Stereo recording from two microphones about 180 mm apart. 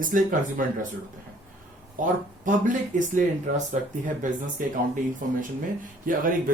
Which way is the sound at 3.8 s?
40° right (ahead or behind).